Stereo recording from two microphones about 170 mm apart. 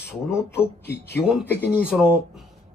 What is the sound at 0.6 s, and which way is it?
Speech, 15° left (ahead or behind).